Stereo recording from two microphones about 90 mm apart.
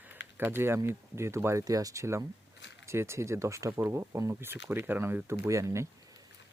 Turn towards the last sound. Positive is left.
turn(degrees=-35)  # may be behind; listen again after turning